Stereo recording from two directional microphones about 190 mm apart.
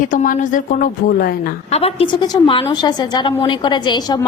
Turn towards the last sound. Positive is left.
turn(degrees=20)  # may be behind; listen again after turning